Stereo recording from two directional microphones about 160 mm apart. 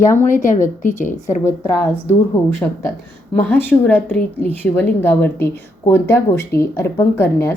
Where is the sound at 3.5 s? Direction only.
10° left (ahead or behind).